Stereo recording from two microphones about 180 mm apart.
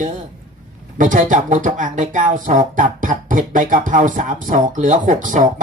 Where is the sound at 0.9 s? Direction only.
45° right (ahead or behind).